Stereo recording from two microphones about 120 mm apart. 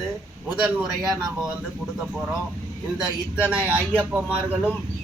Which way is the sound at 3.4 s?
15° right (ahead or behind).